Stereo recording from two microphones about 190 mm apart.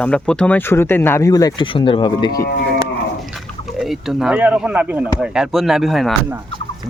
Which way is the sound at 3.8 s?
Centre (ahead or behind).